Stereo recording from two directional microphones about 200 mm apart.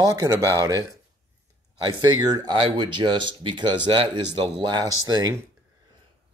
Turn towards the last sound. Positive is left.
turn(degrees=-20)  # may be behind; listen again after turning